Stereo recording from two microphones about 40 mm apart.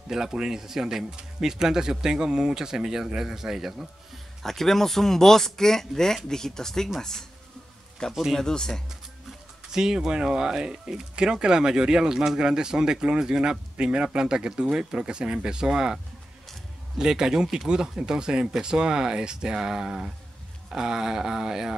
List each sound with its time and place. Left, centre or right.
0.1 s speech: centre
4.4 s speech: centre
9.7 s speech: centre
17.0 s speech: centre